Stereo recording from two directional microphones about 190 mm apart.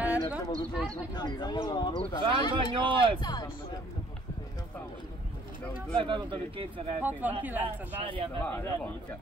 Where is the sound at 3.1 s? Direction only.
25° left (ahead or behind).